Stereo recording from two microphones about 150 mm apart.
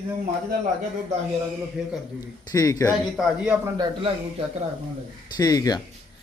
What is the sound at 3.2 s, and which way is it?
Speech, 5° right (ahead or behind).